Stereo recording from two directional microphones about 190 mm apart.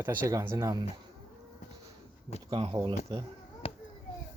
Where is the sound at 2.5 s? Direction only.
30° right (ahead or behind).